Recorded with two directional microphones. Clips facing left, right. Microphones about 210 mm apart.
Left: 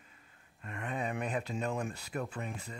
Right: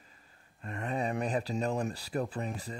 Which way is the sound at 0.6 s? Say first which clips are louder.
Right 4 dB; 35° right (ahead or behind).